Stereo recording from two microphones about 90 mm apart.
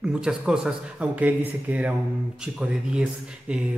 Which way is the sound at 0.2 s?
5° right (ahead or behind).